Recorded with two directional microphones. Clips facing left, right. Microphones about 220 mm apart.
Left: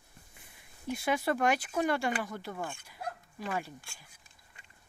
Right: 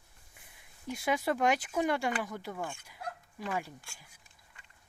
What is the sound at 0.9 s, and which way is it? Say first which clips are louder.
Speech: left 1 dB; 15° right (ahead or behind).